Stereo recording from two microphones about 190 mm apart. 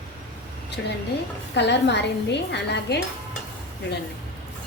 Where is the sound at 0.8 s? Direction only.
65° left (ahead or behind).